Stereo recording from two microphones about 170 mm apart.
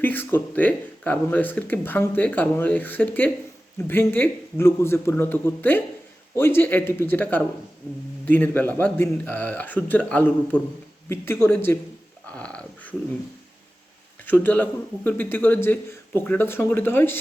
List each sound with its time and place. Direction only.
0.0 s speech: 10° left (ahead or behind)
12.2 s a sound: 5° left (ahead or behind)
14.4 s speech: 10° left (ahead or behind)